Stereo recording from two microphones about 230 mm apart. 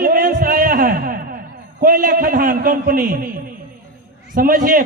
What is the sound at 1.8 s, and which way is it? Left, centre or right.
A man's voice, right.